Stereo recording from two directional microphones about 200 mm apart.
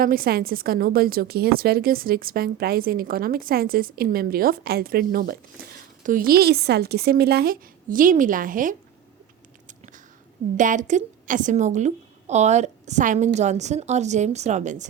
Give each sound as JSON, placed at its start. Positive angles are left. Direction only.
{"t": 0.0, "sound": "a woman's voice", "side_deg": -45}
{"t": 9.6, "sound": "a sound", "side_deg": -40}
{"t": 10.6, "sound": "a woman's voice", "side_deg": -40}